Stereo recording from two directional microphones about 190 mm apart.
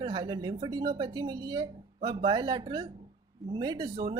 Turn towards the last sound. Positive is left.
turn(degrees=-25)  # may be behind; listen again after turning